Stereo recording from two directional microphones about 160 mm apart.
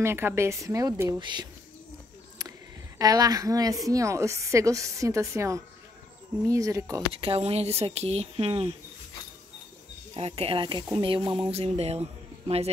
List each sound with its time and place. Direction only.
0.0 s a woman's voice: 15° right (ahead or behind)
3.0 s a woman's voice: 25° right (ahead or behind)
7.1 s speech: 35° right (ahead or behind)
10.1 s speech: 40° right (ahead or behind)